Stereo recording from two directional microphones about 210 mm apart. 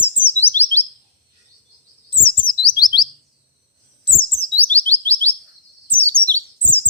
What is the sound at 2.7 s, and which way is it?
Chirp, 20° left (ahead or behind).